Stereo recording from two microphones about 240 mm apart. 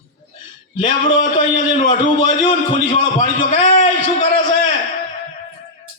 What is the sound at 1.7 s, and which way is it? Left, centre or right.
A man's voice, left.